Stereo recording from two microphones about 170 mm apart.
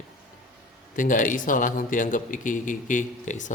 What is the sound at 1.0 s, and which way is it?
A man's voice, 50° left (ahead or behind).